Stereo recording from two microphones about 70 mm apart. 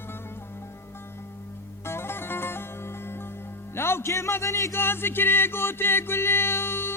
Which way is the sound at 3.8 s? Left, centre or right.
Left.